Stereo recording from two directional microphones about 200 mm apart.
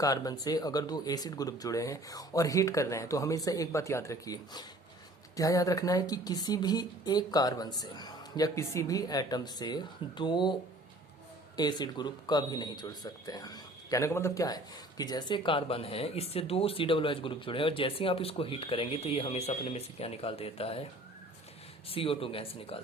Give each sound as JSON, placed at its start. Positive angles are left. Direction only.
{"t": 0.0, "sound": "speech", "side_deg": 20}
{"t": 21.8, "sound": "speech", "side_deg": 30}